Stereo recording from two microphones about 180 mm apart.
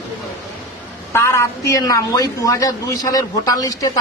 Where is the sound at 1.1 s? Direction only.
15° left (ahead or behind).